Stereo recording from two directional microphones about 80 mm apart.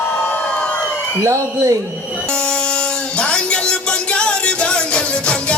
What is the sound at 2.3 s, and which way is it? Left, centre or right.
Music, centre.